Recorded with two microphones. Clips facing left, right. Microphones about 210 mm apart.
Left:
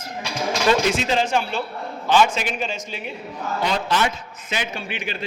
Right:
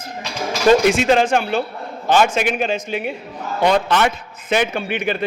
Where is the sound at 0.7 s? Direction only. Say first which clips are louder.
Right 8 dB; 50° right (ahead or behind).